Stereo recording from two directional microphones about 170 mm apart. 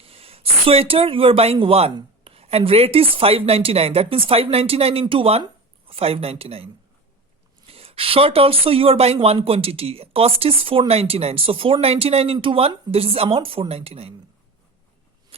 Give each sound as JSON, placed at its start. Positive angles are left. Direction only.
{"t": 0.0, "sound": "speech", "side_deg": -35}
{"t": 7.7, "sound": "speech", "side_deg": -35}
{"t": 15.3, "sound": "a sound", "side_deg": -35}